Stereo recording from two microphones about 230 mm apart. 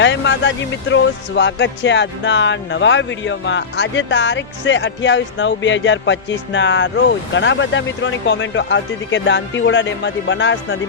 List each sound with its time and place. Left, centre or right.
0.0 s speech: left